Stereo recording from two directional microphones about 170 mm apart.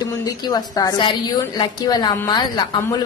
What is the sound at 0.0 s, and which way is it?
Speech, 25° left (ahead or behind).